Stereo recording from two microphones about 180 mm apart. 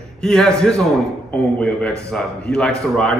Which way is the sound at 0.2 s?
5° left (ahead or behind).